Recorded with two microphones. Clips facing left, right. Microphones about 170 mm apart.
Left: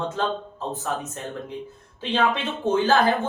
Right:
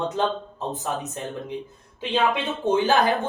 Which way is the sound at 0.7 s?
20° right (ahead or behind).